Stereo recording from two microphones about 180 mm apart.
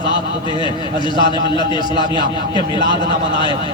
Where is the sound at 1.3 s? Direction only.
25° left (ahead or behind).